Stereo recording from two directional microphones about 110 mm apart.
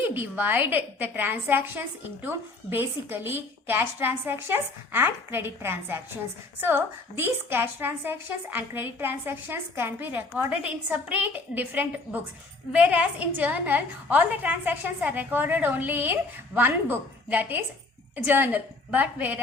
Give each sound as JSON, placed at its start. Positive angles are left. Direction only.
{"t": 0.0, "sound": "a woman's voice", "side_deg": -20}